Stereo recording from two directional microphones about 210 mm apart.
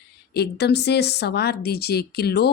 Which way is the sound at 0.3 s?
50° left (ahead or behind).